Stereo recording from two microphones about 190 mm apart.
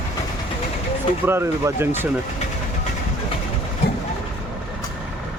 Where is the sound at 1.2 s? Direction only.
10° right (ahead or behind).